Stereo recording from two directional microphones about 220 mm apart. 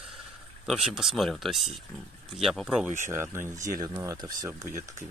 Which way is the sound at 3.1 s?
10° right (ahead or behind).